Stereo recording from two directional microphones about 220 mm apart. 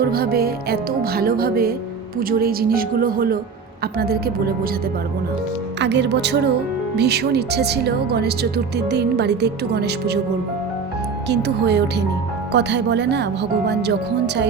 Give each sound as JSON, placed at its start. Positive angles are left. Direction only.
{"t": 0.0, "sound": "speech", "side_deg": -45}
{"t": 5.8, "sound": "speech", "side_deg": -50}
{"t": 11.3, "sound": "speech", "side_deg": -50}